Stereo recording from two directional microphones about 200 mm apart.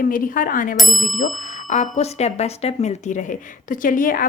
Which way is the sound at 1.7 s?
35° left (ahead or behind).